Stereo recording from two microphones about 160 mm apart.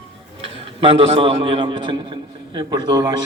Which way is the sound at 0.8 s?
30° right (ahead or behind).